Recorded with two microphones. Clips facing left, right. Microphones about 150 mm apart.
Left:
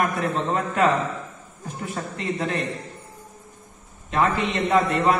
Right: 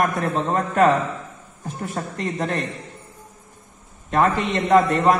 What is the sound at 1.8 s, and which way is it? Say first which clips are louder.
Speech: right 1 dB; 45° right (ahead or behind).